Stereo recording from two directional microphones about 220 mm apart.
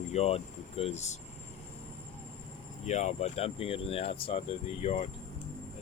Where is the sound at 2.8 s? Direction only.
30° left (ahead or behind).